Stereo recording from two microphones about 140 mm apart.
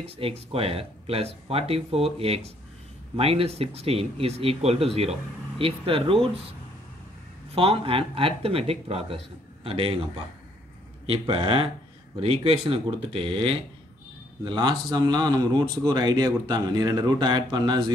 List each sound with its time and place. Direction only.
0.0 s speech: 45° right (ahead or behind)
7.5 s speech: 40° right (ahead or behind)